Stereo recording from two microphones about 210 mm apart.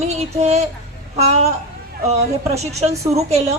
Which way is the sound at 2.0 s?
30° right (ahead or behind).